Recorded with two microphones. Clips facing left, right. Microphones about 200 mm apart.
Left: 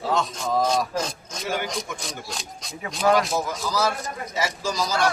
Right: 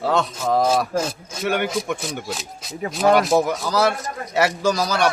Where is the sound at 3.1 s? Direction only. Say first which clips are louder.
Right 5 dB; 65° right (ahead or behind).